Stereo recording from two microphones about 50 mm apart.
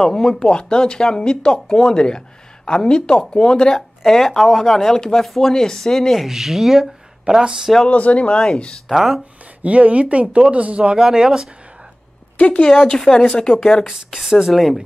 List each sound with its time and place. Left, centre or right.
0.0 s speech: centre
6.2 s speech: centre
7.9 s speech: left
8.8 s speech: centre
9.6 s speech: right
10.8 s speech: centre
12.4 s speech: left
12.7 s speech: centre
13.8 s speech: centre
14.5 s speech: centre